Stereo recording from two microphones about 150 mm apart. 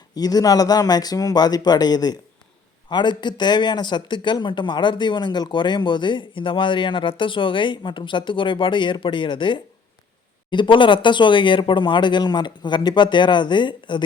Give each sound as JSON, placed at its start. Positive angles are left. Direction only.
{"t": 0.1, "sound": "speech", "side_deg": 25}